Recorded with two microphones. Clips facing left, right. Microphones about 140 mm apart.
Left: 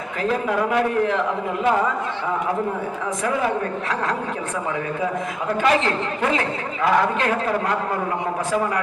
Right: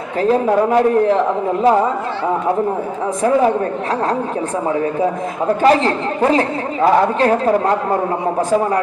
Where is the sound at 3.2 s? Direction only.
35° right (ahead or behind).